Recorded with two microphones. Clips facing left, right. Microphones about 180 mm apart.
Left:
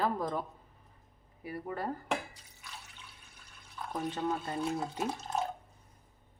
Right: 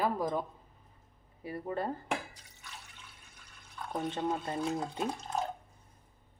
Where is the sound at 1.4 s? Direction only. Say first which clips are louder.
Right 2 dB; 25° right (ahead or behind).